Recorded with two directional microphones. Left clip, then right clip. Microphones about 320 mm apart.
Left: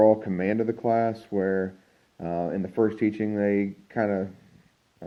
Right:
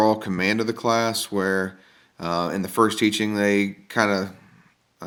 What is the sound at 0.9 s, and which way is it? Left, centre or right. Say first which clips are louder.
Speech: right 2 dB; centre.